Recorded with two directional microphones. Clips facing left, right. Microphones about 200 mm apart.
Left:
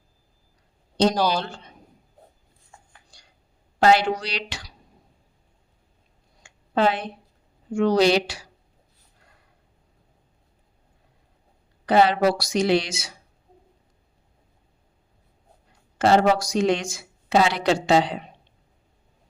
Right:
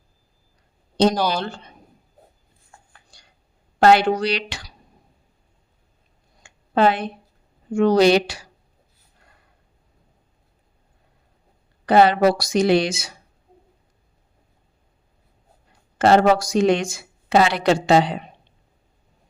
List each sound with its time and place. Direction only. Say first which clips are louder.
1.3 s speech: right 1 dB; 55° right (ahead or behind)
3.8 s speech: right 3 dB; 60° right (ahead or behind)
6.4 s a sound: right 3 dB; 55° right (ahead or behind)
7.8 s speech: right 4 dB; 55° right (ahead or behind)
11.9 s speech: right 3 dB; 55° right (ahead or behind)
16.0 s speech: right 3 dB; 60° right (ahead or behind)